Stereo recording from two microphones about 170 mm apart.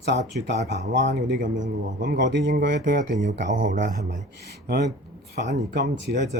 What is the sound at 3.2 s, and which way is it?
Speech, 90° right.